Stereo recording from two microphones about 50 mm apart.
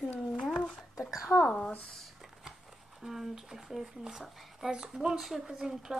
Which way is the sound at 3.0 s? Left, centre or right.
Centre.